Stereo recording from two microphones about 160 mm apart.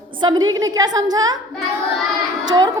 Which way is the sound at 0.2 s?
25° right (ahead or behind).